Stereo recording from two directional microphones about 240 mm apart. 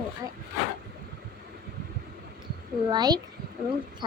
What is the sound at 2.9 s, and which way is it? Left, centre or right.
Speech, centre.